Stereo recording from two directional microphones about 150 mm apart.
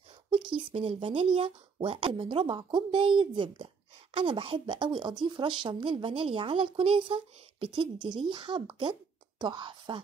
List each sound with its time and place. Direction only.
0.6 s speech: 40° right (ahead or behind)